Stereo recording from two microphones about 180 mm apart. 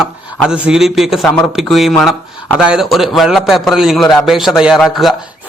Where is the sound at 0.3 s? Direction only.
5° right (ahead or behind).